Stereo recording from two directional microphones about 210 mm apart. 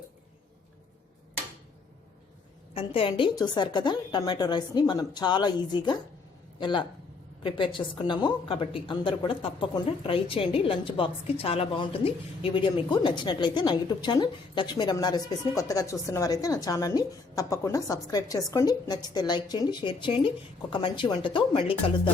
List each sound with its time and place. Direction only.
2.7 s a woman's voice: 25° left (ahead or behind)